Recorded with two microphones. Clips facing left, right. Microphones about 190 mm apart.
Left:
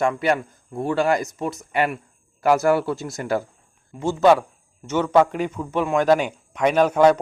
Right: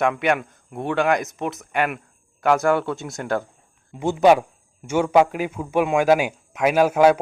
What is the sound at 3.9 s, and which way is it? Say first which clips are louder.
A man's voice: right 1 dB; 15° right (ahead or behind).